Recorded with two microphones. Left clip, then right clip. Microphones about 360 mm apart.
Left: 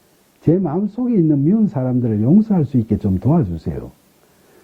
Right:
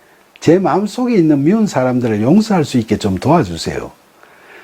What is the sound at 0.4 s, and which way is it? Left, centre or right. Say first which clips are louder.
Speech: right 7 dB; centre.